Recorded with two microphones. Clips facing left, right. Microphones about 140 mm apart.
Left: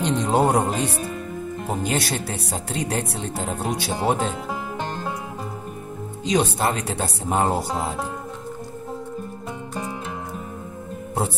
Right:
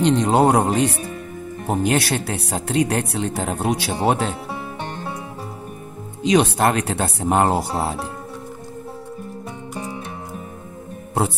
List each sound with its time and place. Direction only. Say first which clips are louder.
0.0 s speech: right 4 dB; 70° right (ahead or behind)
6.2 s speech: right 5 dB; 70° right (ahead or behind)